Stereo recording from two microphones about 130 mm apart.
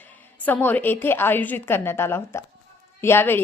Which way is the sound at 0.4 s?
15° left (ahead or behind).